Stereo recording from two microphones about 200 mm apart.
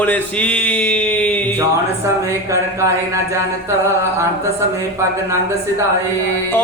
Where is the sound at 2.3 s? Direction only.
15° right (ahead or behind).